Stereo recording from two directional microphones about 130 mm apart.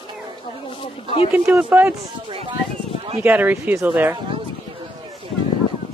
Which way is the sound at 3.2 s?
15° right (ahead or behind).